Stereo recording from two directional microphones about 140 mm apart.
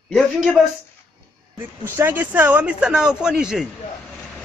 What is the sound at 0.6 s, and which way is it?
Speech, centre (ahead or behind).